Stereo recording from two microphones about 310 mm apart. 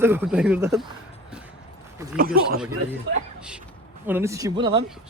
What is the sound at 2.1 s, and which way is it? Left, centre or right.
Speech, right.